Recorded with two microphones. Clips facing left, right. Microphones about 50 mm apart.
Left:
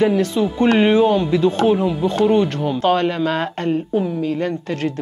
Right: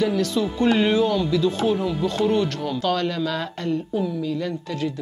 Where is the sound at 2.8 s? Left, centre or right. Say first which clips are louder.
Left 6 dB; left.